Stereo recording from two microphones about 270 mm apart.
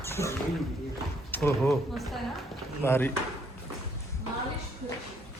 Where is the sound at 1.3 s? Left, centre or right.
Centre.